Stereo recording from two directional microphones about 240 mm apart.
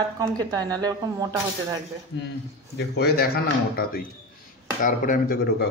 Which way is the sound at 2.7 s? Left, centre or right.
Left.